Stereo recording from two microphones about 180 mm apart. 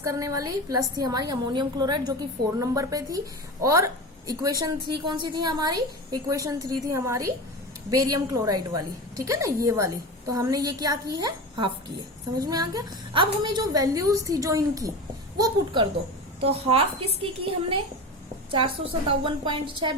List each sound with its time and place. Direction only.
0.0 s a woman's voice: 15° right (ahead or behind)